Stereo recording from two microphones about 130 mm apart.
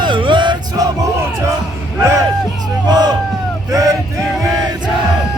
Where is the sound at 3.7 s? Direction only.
25° right (ahead or behind).